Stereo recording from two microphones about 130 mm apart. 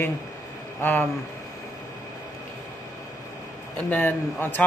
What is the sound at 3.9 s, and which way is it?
Speech, 15° left (ahead or behind).